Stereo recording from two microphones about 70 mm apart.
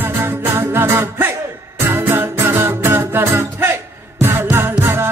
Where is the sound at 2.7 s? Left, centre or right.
Right.